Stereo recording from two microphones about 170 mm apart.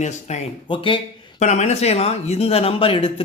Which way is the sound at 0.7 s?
30° left (ahead or behind).